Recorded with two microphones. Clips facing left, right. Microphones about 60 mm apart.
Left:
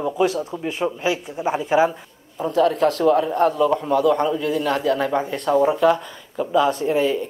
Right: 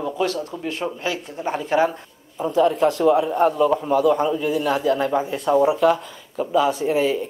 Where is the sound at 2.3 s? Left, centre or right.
Centre.